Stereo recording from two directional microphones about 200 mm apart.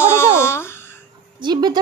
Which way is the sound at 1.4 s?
20° right (ahead or behind).